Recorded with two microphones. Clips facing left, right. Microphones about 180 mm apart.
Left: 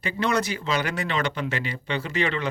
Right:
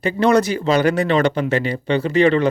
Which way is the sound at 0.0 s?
40° right (ahead or behind).